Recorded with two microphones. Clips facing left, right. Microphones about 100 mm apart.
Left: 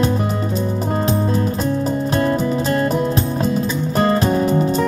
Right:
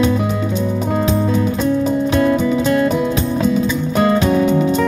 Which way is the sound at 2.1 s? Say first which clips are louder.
Right 3 dB; 35° left (ahead or behind).